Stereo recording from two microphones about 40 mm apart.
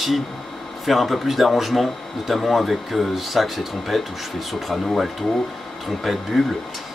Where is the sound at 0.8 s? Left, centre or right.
Centre.